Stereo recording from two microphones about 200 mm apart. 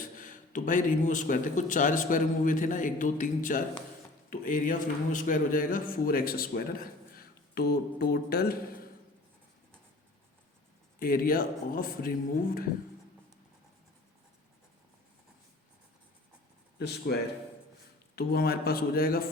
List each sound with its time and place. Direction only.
0.2 s a man's voice: 40° left (ahead or behind)
11.0 s a man's voice: 45° left (ahead or behind)
16.7 s speech: 55° left (ahead or behind)
18.2 s a man's voice: 50° left (ahead or behind)